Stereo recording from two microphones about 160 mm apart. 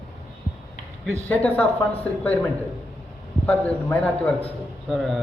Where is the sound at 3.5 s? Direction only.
10° left (ahead or behind).